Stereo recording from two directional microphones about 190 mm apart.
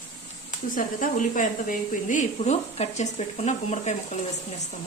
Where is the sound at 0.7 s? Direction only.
45° left (ahead or behind).